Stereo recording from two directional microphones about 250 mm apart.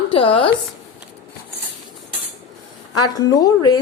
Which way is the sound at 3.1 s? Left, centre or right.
Centre.